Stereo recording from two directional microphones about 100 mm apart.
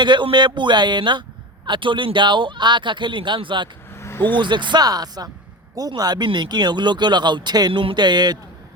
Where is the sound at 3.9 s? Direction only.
25° left (ahead or behind).